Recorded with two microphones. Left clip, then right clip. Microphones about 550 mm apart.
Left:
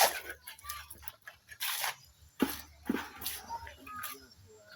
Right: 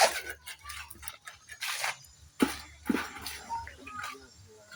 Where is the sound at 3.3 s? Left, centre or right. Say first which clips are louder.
Right 2 dB; left.